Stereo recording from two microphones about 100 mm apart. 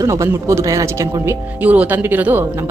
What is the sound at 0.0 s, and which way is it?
Speech, 30° right (ahead or behind).